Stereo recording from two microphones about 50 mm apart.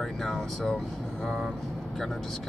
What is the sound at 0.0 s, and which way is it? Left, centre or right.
Speech, centre.